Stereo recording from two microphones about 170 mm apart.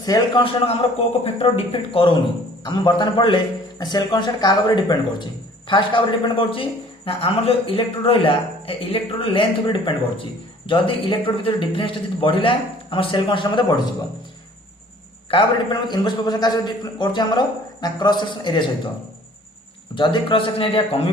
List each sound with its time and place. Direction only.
0.0 s a man's voice: 25° left (ahead or behind)
15.3 s speech: 30° left (ahead or behind)
20.0 s a man's voice: 30° left (ahead or behind)